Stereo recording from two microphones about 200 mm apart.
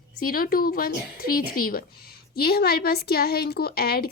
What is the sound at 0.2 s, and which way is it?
A woman's voice, 45° left (ahead or behind).